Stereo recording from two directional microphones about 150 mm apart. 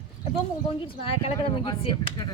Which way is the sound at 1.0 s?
40° left (ahead or behind).